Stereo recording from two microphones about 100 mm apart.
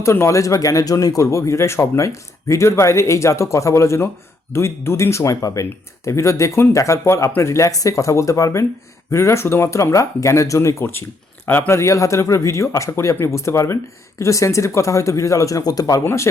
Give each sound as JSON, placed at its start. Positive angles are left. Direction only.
{"t": 0.0, "sound": "speech", "side_deg": 25}